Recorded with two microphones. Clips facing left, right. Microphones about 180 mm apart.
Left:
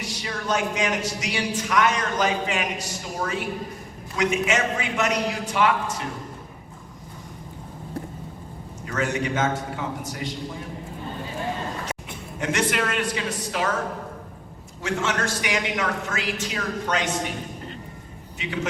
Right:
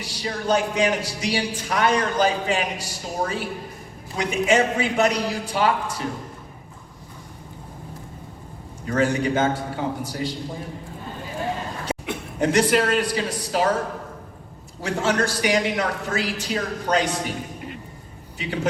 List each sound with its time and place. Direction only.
0.0 s a man's voice: 30° right (ahead or behind)
8.9 s a man's voice: 35° right (ahead or behind)
12.4 s a man's voice: 35° right (ahead or behind)
14.8 s a man's voice: 35° right (ahead or behind)
18.4 s a man's voice: 35° right (ahead or behind)